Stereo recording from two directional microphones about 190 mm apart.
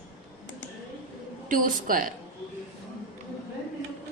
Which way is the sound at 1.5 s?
45° right (ahead or behind).